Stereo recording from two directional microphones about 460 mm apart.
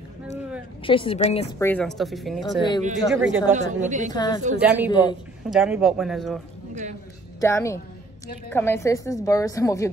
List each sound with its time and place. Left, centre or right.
0.8 s a woman's voice: centre
3.8 s a woman's voice: centre
4.1 s a woman's voice: centre
4.6 s a woman's voice: centre
6.7 s a man's voice: centre
7.3 s a woman's voice: centre